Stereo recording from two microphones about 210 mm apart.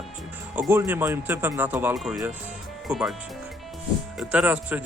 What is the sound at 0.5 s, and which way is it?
Speech, 10° right (ahead or behind).